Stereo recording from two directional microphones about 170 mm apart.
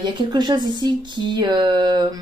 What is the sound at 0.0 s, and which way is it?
Speech, 25° right (ahead or behind).